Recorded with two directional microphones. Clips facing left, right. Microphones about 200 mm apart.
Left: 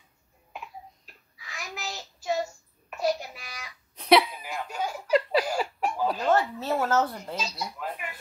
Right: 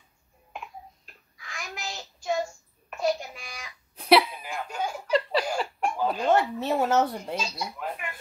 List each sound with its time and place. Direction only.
1.3 s child singing: 5° left (ahead or behind)
3.0 s babbling: 5° left (ahead or behind)
3.9 s a sound: 5° right (ahead or behind)
4.4 s snicker: 5° left (ahead or behind)
6.1 s speech: 15° right (ahead or behind)
7.5 s speech: centre (ahead or behind)